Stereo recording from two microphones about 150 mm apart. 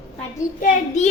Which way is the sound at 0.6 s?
55° left (ahead or behind).